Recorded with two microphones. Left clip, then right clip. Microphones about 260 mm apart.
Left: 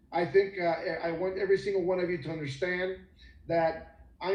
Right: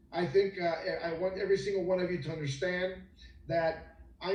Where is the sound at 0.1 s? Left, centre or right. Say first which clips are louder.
Left 3 dB; left.